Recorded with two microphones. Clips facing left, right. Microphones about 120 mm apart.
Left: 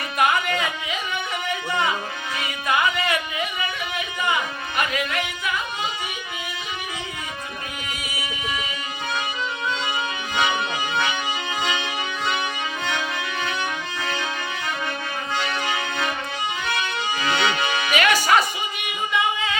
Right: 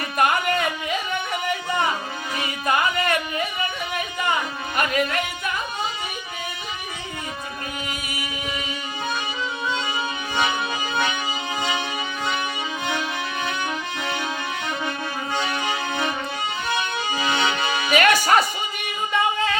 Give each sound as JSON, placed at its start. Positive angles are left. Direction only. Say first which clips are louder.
{"t": 0.2, "sound": "music", "louder": "right 1 dB", "side_deg": -50}
{"t": 2.6, "sound": "music", "louder": "right 1 dB", "side_deg": -40}
{"t": 4.8, "sound": "music", "louder": "right 3 dB", "side_deg": -45}
{"t": 15.4, "sound": "music", "louder": "even", "side_deg": -15}
{"t": 17.9, "sound": "music", "louder": "right 2 dB", "side_deg": -45}
{"t": 19.1, "sound": "singing", "louder": "right 2 dB", "side_deg": -45}